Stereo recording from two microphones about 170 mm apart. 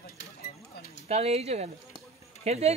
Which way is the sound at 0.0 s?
65° left (ahead or behind).